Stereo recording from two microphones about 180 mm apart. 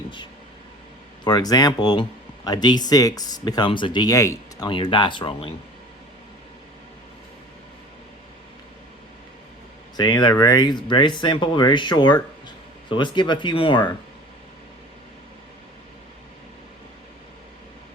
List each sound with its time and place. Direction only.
1.2 s speech: 20° left (ahead or behind)
4.7 s speech: 30° left (ahead or behind)
10.0 s speech: 20° left (ahead or behind)